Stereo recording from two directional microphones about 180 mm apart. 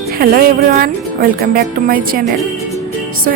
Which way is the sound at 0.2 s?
55° right (ahead or behind).